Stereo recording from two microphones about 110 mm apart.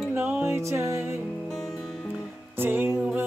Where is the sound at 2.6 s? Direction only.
20° right (ahead or behind).